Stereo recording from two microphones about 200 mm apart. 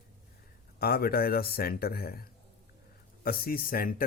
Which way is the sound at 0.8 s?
50° left (ahead or behind).